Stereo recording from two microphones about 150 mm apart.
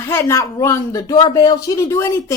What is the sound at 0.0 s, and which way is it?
Speech, 20° left (ahead or behind).